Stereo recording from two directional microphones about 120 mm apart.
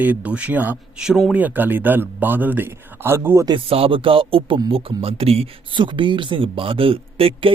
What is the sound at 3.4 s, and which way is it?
Speech, 50° right (ahead or behind).